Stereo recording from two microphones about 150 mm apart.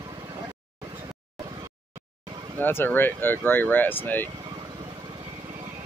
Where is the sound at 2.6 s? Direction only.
15° left (ahead or behind).